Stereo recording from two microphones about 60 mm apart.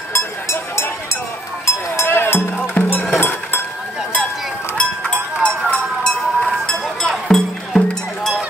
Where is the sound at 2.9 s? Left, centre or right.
Left.